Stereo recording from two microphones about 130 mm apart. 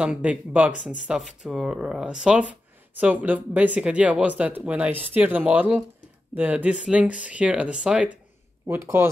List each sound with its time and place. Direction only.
0.0 s speech: 10° right (ahead or behind)
8.6 s speech: 20° right (ahead or behind)